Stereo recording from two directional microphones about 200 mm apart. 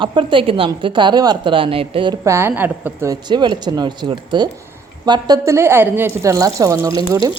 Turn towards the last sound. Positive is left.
turn(degrees=-20)  # may be behind; listen again after turning